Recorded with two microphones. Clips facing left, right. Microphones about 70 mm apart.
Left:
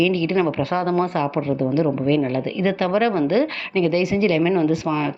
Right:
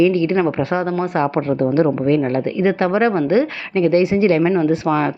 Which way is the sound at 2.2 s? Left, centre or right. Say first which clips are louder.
Right 4 dB; right.